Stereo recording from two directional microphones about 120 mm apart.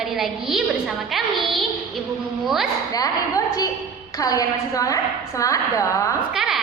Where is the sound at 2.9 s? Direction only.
30° left (ahead or behind).